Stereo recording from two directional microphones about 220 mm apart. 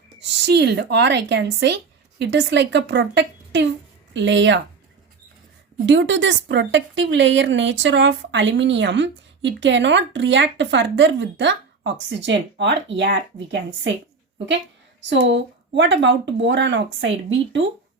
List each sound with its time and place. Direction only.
0.4 s a woman's voice: 50° right (ahead or behind)
5.8 s speech: 55° right (ahead or behind)
15.1 s a woman's voice: 55° right (ahead or behind)